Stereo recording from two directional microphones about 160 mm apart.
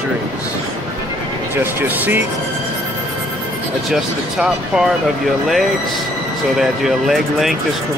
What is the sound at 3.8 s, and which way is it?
Speech, centre (ahead or behind).